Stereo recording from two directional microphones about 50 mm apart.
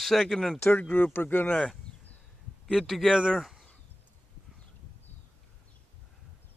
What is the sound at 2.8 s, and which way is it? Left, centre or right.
Speech, centre.